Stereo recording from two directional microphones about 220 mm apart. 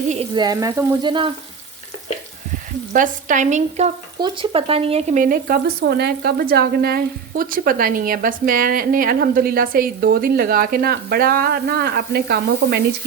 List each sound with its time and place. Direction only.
0.1 s frying: 25° right (ahead or behind)
2.9 s speech: 35° right (ahead or behind)